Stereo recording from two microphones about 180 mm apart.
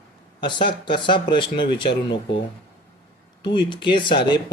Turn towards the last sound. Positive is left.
turn(degrees=25)  # may be behind; listen again after turning